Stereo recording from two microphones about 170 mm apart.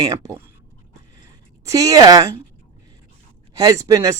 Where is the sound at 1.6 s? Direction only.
20° right (ahead or behind).